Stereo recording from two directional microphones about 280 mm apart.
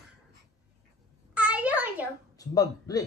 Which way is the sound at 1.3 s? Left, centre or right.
Centre.